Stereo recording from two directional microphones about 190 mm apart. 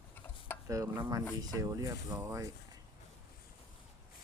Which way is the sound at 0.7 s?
20° right (ahead or behind).